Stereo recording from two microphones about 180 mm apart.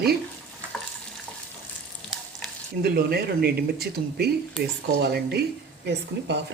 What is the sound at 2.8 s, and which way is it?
Speech, 60° right (ahead or behind).